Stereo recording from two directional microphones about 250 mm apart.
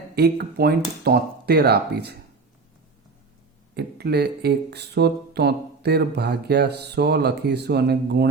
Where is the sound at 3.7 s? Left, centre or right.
Right.